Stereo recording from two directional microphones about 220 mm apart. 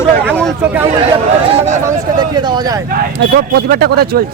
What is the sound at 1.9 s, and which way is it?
Speech, 20° right (ahead or behind).